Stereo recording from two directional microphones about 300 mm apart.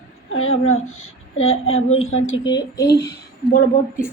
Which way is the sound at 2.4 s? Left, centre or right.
Centre.